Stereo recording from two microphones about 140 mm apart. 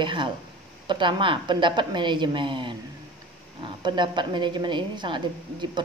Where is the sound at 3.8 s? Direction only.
35° right (ahead or behind).